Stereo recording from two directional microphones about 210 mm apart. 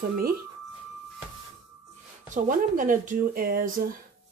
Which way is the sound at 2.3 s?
40° right (ahead or behind).